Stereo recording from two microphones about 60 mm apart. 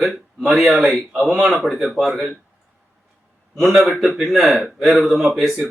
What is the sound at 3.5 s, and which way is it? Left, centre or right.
A man's voice, centre.